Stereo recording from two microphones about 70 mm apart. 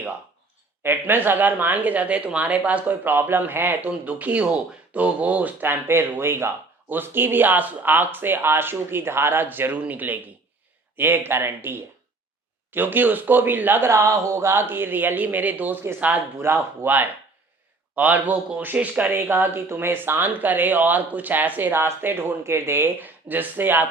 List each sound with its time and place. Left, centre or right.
0.8 s speech: right
3.8 s speech: centre
13.9 s speech: right
16.8 s speech: right
19.1 s speech: right